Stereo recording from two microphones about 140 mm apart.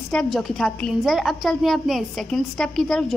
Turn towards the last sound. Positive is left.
turn(degrees=5)  # may be behind; listen again after turning